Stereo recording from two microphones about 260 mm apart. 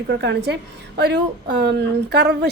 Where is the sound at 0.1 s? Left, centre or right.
Right.